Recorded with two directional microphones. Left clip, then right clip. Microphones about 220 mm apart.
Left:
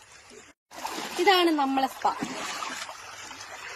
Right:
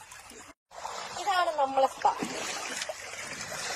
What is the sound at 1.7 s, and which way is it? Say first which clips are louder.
Speech: right 1 dB; 50° left (ahead or behind).